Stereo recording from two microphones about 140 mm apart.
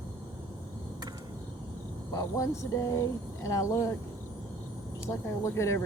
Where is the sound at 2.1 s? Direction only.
25° left (ahead or behind).